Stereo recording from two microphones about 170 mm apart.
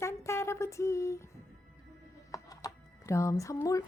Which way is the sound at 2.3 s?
20° left (ahead or behind).